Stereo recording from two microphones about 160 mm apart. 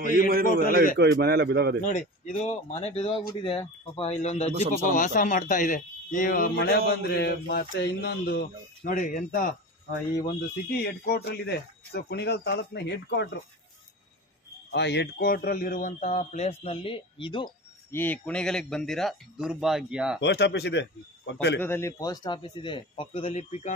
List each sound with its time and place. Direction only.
0.3 s a man's voice: 65° right (ahead or behind)
0.9 s a man's voice: 90° right
1.9 s speech: 45° left (ahead or behind)
10.2 s speech: 75° left (ahead or behind)
14.7 s a man's voice: 90° left; by 17.5 s 30° left (ahead or behind)
17.9 s speech: 10° left (ahead or behind); by 20.2 s 5° right (ahead or behind)
20.2 s speech: 90° left
21.5 s a man's voice: 15° left (ahead or behind); by 23.7 s 40° left (ahead or behind)